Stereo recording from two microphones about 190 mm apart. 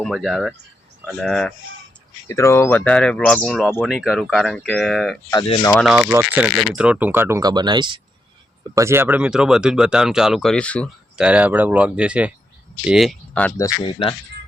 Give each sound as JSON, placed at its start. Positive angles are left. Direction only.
{"t": 0.0, "sound": "speech", "side_deg": 0}
{"t": 2.3, "sound": "speech", "side_deg": 15}
{"t": 11.2, "sound": "speech", "side_deg": -5}
{"t": 13.6, "sound": "speech", "side_deg": 20}